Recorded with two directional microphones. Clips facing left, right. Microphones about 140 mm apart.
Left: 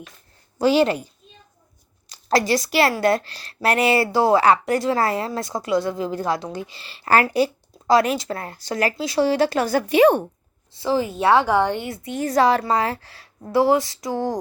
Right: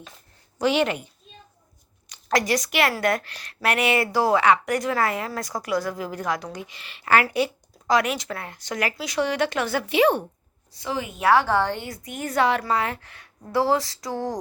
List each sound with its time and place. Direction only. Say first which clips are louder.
0.6 s speech: left 4 dB; 35° left (ahead or behind)
2.0 s a woman's voice: left 3 dB; 30° left (ahead or behind); by 10.2 s 45° left (ahead or behind)
10.8 s speech: left 8 dB; 30° left (ahead or behind)
11.4 s a woman's voice: left 3 dB; 15° left (ahead or behind)